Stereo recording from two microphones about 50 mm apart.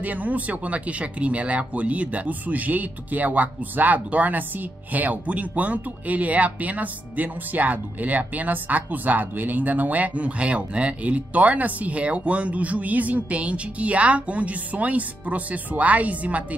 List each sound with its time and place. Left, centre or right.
0.0 s speech: right